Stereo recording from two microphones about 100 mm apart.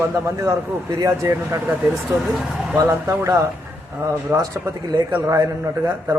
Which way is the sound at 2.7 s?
30° right (ahead or behind).